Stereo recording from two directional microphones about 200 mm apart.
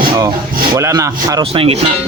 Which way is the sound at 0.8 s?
15° right (ahead or behind).